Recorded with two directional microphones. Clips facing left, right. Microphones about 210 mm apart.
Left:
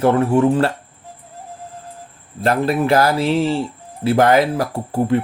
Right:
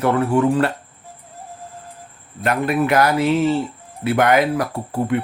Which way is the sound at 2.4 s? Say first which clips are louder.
Left 2 dB; 30° left (ahead or behind).